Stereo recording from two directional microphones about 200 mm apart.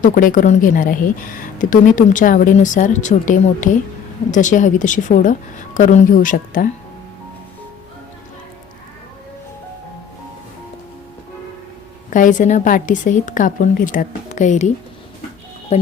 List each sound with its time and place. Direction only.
0.0 s speech: 40° left (ahead or behind)
12.1 s speech: 40° left (ahead or behind)
15.7 s speech: 35° left (ahead or behind)